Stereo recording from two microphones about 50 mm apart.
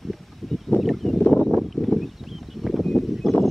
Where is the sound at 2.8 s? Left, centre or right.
Centre.